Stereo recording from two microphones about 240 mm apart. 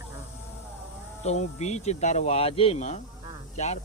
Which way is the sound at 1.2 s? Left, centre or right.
Left.